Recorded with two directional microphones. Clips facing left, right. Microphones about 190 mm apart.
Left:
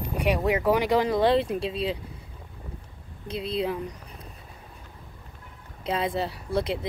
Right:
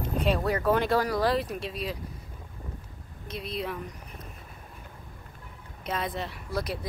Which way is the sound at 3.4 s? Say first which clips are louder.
Left 6 dB; 30° left (ahead or behind).